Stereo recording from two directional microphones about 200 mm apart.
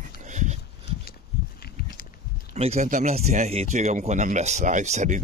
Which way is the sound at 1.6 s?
50° left (ahead or behind).